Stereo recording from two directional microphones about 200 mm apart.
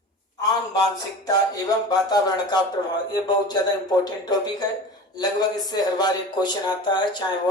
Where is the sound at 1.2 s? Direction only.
20° left (ahead or behind).